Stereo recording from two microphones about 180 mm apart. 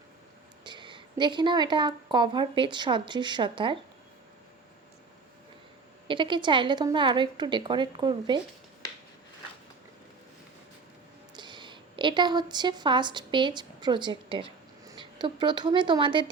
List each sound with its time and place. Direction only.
0.6 s speech: 25° right (ahead or behind)
6.1 s a woman's voice: 25° right (ahead or behind)
11.3 s speech: 25° right (ahead or behind)